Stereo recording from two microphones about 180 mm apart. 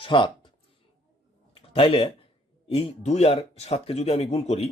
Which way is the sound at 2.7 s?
35° left (ahead or behind).